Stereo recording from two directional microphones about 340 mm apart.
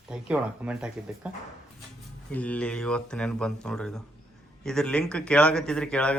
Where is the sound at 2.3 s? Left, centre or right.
Centre.